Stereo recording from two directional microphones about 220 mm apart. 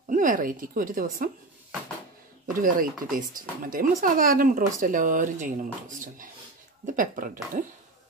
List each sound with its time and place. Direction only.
0.1 s speech: 35° right (ahead or behind)
2.5 s speech: 40° right (ahead or behind)